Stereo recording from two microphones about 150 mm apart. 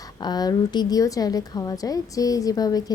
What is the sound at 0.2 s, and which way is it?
A woman's voice, 25° left (ahead or behind).